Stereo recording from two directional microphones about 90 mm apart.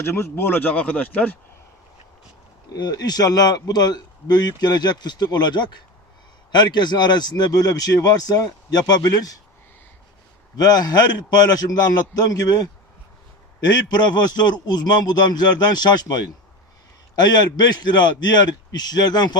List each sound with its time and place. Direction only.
0.0 s speech: 30° left (ahead or behind)
2.7 s speech: 50° left (ahead or behind)
10.6 s speech: 50° left (ahead or behind)